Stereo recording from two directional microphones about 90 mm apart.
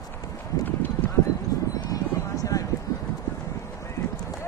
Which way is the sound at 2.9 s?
40° left (ahead or behind).